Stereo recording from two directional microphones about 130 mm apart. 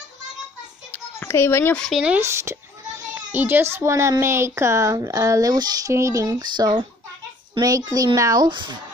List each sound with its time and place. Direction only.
0.9 s a sound: 20° left (ahead or behind)
1.9 s speech: 5° right (ahead or behind)
2.1 s a child's voice: 20° right (ahead or behind); by 8.7 s 35° right (ahead or behind)